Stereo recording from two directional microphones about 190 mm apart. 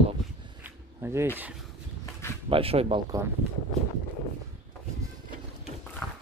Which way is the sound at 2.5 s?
30° right (ahead or behind).